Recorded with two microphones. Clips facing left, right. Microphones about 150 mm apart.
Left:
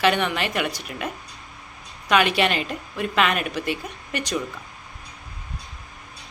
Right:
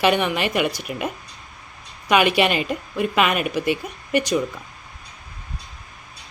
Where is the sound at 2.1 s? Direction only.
10° right (ahead or behind).